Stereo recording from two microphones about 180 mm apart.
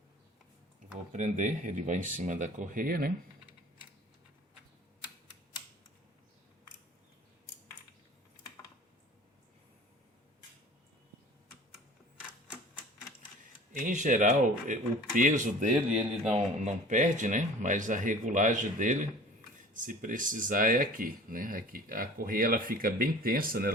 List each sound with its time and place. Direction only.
0.9 s speech: 40° right (ahead or behind)
13.4 s speech: 45° right (ahead or behind)